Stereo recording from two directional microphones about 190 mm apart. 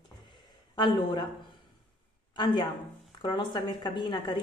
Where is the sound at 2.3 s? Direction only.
25° left (ahead or behind).